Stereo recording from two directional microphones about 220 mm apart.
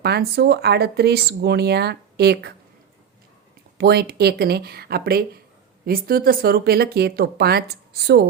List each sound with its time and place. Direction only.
0.0 s speech: 45° right (ahead or behind)
3.8 s speech: 45° right (ahead or behind)